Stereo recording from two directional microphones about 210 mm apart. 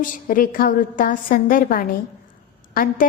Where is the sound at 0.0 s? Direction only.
40° left (ahead or behind).